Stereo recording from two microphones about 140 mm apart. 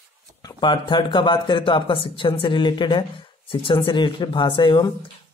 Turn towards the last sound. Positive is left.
turn(degrees=35)  # may be behind; listen again after turning